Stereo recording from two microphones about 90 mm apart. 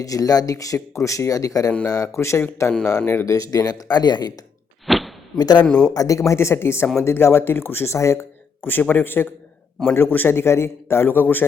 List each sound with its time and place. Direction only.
0.0 s speech: 40° left (ahead or behind)
2.6 s speech: 10° left (ahead or behind)
3.1 s speech: 35° left (ahead or behind); by 4.4 s 50° left (ahead or behind)
4.9 s a sound: centre (ahead or behind)
5.4 s speech: 50° left (ahead or behind)
5.6 s speech: 5° left (ahead or behind)
5.9 s speech: 40° left (ahead or behind); by 11.4 s 25° left (ahead or behind)